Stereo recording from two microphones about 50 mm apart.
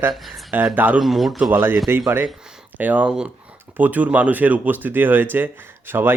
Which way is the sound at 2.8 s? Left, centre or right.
Right.